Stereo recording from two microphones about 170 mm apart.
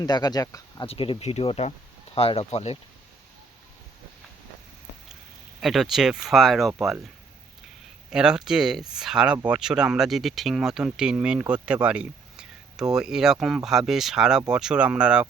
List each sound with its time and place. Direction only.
0.0 s speech: 25° left (ahead or behind)
0.9 s speech: 35° left (ahead or behind)
5.5 s speech: centre (ahead or behind)
8.1 s speech: 5° right (ahead or behind)